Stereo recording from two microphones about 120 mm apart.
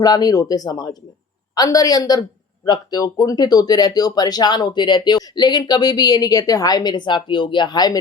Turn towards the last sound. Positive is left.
turn(degrees=35)  # may be behind; listen again after turning